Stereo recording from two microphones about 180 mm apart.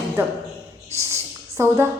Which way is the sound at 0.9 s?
15° right (ahead or behind).